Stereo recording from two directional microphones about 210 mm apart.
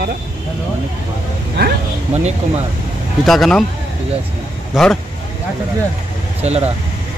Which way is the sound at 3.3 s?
Centre (ahead or behind).